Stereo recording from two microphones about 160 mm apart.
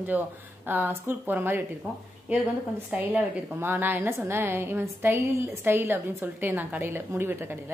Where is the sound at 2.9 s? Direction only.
10° right (ahead or behind).